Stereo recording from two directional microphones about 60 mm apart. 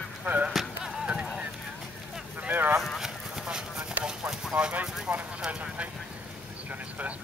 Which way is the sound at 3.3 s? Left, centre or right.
Centre.